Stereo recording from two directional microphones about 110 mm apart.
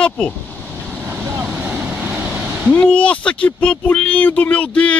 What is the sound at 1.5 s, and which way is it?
Waves, 15° right (ahead or behind).